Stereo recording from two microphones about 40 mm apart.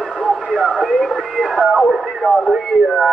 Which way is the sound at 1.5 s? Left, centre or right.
Centre.